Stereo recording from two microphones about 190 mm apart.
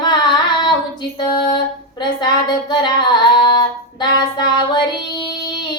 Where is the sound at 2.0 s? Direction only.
25° left (ahead or behind).